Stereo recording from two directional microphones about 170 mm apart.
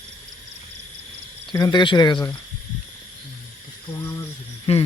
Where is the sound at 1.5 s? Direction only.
25° left (ahead or behind).